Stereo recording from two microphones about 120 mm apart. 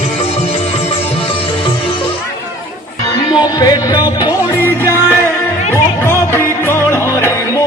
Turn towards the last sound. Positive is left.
turn(degrees=20)  # may be behind; listen again after turning